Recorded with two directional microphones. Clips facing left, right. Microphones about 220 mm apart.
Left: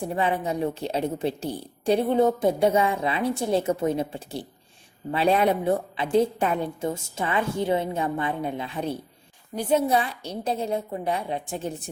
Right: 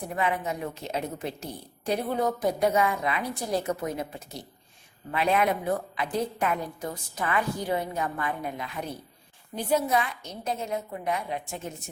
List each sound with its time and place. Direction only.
0.0 s a woman's voice: 30° left (ahead or behind)